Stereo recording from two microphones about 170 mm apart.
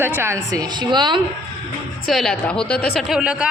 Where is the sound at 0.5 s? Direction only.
25° right (ahead or behind).